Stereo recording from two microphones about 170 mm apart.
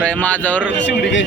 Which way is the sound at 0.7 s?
90° left.